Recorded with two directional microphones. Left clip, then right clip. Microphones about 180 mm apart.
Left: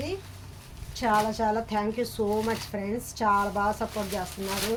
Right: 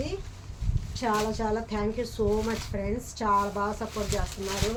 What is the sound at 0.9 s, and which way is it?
A woman's voice, 50° left (ahead or behind).